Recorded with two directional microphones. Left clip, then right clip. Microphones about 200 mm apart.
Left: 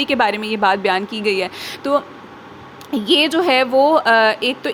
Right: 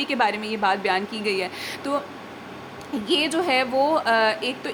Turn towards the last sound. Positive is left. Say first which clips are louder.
# left 6 dB
turn(degrees=30)  # may be behind; listen again after turning